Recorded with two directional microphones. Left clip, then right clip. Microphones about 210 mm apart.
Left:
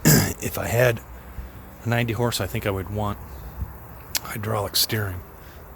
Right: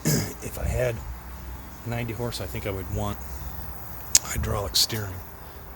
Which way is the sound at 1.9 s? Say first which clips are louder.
Left 8 dB; 40° left (ahead or behind).